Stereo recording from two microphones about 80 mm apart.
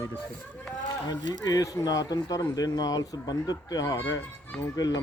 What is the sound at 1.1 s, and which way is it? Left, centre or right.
Speech, left.